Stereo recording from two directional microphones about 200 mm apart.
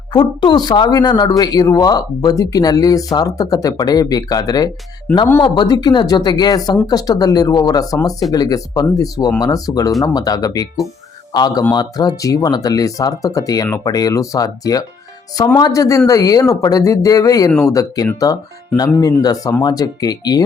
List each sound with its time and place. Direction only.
0.1 s speech: 20° left (ahead or behind)